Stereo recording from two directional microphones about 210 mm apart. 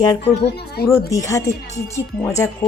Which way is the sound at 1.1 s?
15° left (ahead or behind).